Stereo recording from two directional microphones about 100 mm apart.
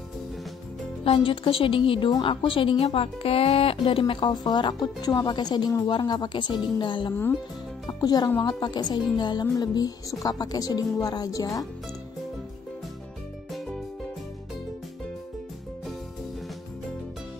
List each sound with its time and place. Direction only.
1.0 s speech: 65° left (ahead or behind)
8.0 s speech: 40° left (ahead or behind)
8.4 s speech: 50° left (ahead or behind); by 11.6 s 35° left (ahead or behind)